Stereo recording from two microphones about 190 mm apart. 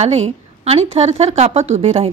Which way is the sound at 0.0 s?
35° right (ahead or behind).